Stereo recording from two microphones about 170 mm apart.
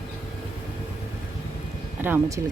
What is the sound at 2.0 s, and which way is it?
Speech, 10° right (ahead or behind).